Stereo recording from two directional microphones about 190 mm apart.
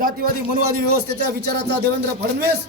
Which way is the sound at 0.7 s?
60° right (ahead or behind).